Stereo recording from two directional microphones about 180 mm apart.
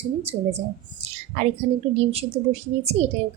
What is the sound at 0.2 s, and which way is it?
A woman's voice, 35° right (ahead or behind).